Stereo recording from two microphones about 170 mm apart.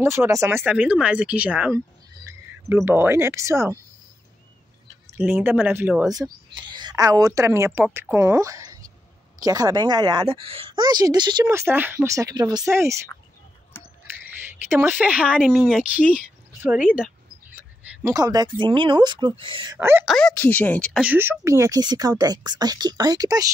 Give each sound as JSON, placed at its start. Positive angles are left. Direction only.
{"t": 0.0, "sound": "speech", "side_deg": -15}
{"t": 5.0, "sound": "a woman's voice", "side_deg": -10}
{"t": 13.7, "sound": "a sound", "side_deg": 15}
{"t": 14.7, "sound": "speech", "side_deg": -15}
{"t": 17.6, "sound": "speech", "side_deg": -20}
{"t": 19.8, "sound": "speech", "side_deg": -15}
{"t": 20.1, "sound": "speech", "side_deg": 5}
{"t": 21.0, "sound": "a woman's voice", "side_deg": -10}